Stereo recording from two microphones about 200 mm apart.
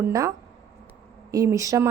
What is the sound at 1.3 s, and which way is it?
Speech, 15° right (ahead or behind).